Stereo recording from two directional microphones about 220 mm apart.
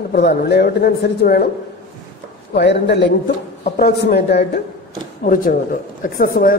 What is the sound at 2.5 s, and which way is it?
A woman's voice, 50° left (ahead or behind).